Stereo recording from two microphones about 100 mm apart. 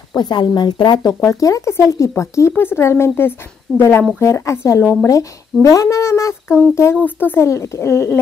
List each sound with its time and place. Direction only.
0.2 s a woman's voice: 45° left (ahead or behind); by 7.4 s 20° left (ahead or behind)
7.4 s speech: 30° left (ahead or behind)